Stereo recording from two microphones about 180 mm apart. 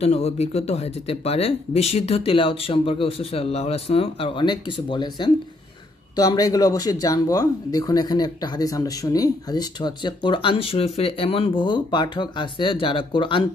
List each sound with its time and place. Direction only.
0.0 s speech: 35° left (ahead or behind)